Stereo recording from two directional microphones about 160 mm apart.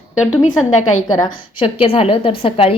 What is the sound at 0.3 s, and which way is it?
Speech, 50° left (ahead or behind).